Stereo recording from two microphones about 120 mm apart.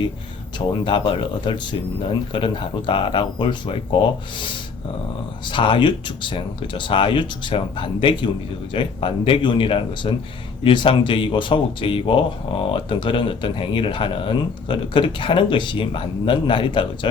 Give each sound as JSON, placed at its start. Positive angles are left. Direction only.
{"t": 0.7, "sound": "speech", "side_deg": 45}